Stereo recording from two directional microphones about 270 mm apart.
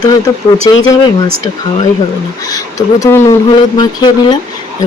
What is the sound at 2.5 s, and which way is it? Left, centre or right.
Speech, centre.